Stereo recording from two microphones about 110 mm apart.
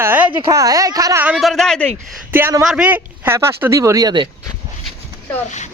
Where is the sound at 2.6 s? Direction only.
10° right (ahead or behind); by 4.2 s 40° right (ahead or behind).